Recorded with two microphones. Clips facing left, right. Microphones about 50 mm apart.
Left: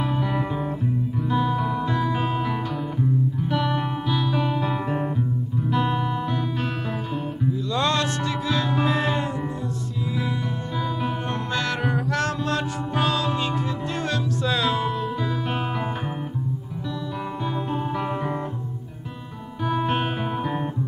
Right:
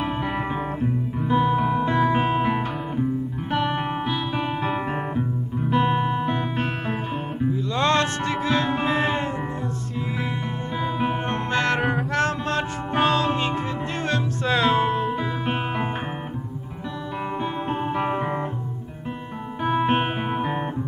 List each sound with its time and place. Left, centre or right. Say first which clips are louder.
0.0 s music: even; right
7.5 s music: right 3 dB; right
10.8 s music: right 3 dB; right
17.9 s music: right 2 dB; right
19.6 s music: right 3 dB; right